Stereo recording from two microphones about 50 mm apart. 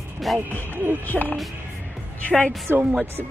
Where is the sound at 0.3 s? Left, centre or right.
Centre.